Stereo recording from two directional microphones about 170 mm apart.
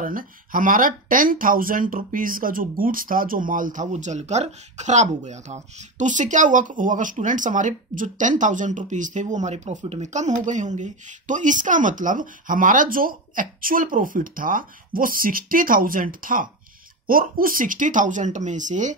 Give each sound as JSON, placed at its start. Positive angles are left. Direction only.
{"t": 0.0, "sound": "speech", "side_deg": -55}